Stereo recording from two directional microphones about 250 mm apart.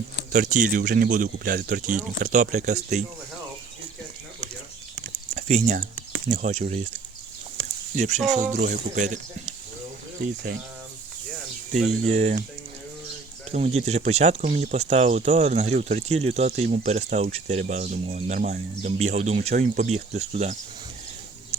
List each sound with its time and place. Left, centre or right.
0.3 s speech: right
5.3 s a sound: right
6.3 s speech: right
7.9 s speech: right
12.0 s speech: right
13.5 s speech: right